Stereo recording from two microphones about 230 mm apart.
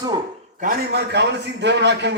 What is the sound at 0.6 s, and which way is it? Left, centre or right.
A man's voice, right.